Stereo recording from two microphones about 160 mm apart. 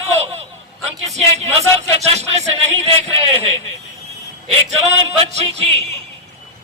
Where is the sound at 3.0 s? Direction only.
40° right (ahead or behind).